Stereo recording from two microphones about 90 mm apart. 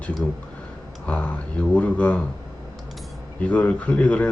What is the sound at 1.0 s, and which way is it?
Speech, 15° left (ahead or behind).